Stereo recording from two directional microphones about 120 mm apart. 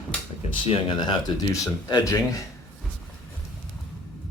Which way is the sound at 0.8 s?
35° left (ahead or behind).